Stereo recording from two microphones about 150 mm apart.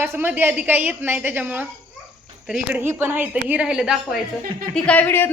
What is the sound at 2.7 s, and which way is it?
A woman's voice, 15° right (ahead or behind).